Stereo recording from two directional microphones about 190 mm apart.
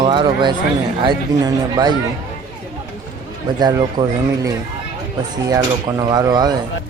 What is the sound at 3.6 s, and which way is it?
Speech, 20° right (ahead or behind).